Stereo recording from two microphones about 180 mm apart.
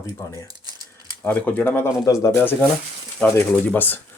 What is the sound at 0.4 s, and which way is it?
Speech, 20° right (ahead or behind).